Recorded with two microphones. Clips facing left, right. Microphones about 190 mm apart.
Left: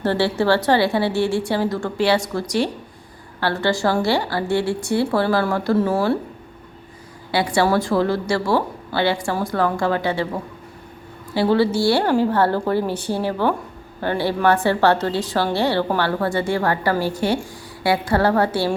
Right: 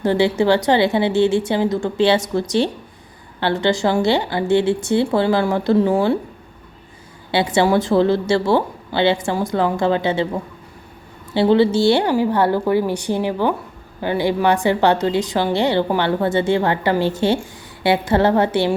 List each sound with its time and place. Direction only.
0.0 s a woman's voice: 15° right (ahead or behind)
7.3 s a woman's voice: 25° right (ahead or behind)